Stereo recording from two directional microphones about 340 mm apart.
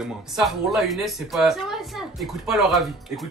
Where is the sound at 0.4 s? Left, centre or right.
Centre.